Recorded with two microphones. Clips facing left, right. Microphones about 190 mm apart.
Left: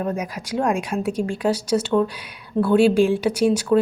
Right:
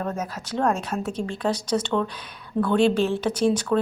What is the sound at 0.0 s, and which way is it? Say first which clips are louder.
Speech: left 3 dB; 10° left (ahead or behind).